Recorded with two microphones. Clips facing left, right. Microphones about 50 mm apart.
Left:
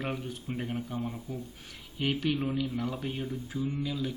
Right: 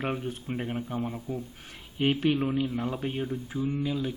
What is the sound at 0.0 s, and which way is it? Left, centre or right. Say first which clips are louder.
Speech: right 4 dB; right.